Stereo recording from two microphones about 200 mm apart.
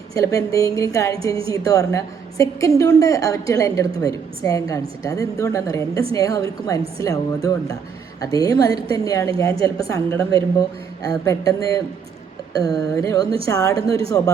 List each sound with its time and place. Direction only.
0.1 s a woman's voice: 15° left (ahead or behind)